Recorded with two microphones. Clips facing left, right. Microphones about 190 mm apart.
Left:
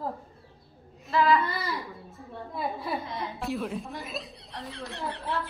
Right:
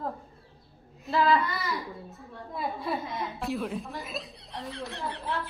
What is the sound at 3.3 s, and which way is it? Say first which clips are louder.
Speech: left 1 dB; centre (ahead or behind).